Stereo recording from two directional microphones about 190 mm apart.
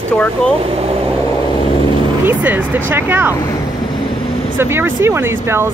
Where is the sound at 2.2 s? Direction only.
10° right (ahead or behind).